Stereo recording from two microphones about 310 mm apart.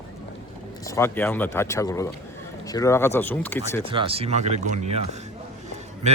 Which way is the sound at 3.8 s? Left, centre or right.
Centre.